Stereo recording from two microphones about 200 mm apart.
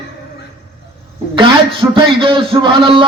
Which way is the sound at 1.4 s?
25° right (ahead or behind).